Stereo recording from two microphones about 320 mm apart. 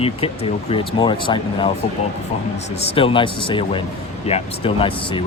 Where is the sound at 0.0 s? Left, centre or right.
Centre.